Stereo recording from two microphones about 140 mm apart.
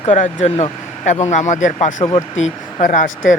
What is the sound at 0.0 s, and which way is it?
Speech, 55° left (ahead or behind).